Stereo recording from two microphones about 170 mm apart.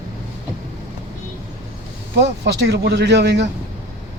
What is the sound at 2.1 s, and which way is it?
Speech, 90° right.